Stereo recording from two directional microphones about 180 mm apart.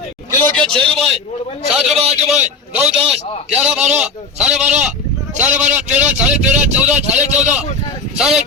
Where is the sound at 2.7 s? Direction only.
5° right (ahead or behind).